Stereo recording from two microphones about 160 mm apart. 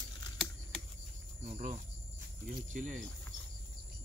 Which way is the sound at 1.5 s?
50° right (ahead or behind).